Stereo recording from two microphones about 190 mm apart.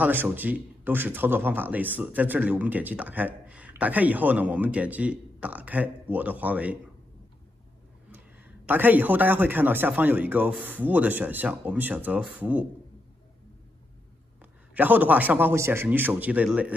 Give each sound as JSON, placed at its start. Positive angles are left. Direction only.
{"t": 0.0, "sound": "speech", "side_deg": -10}
{"t": 8.1, "sound": "speech", "side_deg": -10}
{"t": 14.4, "sound": "speech", "side_deg": -10}